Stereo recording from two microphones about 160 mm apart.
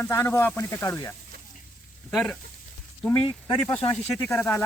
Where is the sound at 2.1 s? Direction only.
Centre (ahead or behind).